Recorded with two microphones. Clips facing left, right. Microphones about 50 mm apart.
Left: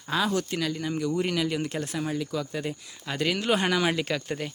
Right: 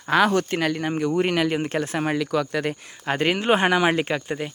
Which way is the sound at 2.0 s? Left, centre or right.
Right.